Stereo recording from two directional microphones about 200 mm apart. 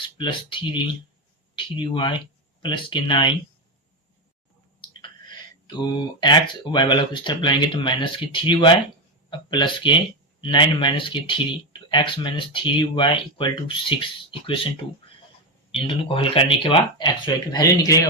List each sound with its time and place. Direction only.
0.0 s speech: 25° left (ahead or behind)
5.6 s speech: 20° left (ahead or behind)
16.0 s speech: 25° left (ahead or behind)